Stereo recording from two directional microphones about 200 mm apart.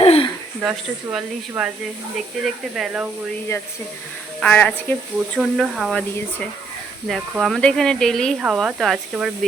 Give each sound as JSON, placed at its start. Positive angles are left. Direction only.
{"t": 0.0, "sound": "a sound", "side_deg": 30}
{"t": 0.6, "sound": "speech", "side_deg": 0}
{"t": 4.4, "sound": "speech", "side_deg": 5}